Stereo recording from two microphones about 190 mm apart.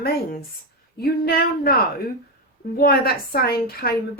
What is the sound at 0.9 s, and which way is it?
Speech, 55° left (ahead or behind).